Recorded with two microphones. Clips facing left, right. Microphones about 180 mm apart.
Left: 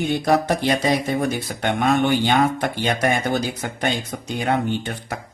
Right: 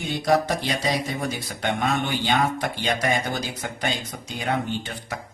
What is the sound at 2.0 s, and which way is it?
Speech, 55° left (ahead or behind).